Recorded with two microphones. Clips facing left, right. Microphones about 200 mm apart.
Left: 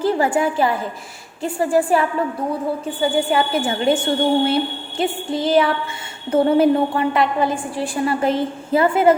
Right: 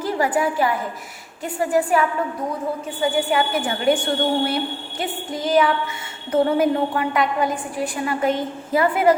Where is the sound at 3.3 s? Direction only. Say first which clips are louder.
Left 2 dB; 30° left (ahead or behind).